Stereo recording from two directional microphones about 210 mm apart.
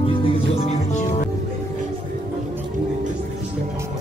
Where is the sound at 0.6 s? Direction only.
35° left (ahead or behind).